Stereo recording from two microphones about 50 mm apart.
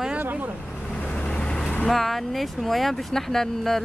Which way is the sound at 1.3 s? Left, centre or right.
Centre.